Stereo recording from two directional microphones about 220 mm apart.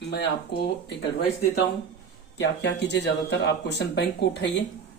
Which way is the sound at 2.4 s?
55° left (ahead or behind).